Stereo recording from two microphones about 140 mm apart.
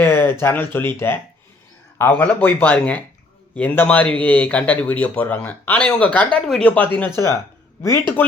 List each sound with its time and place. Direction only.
0.0 s speech: 15° left (ahead or behind)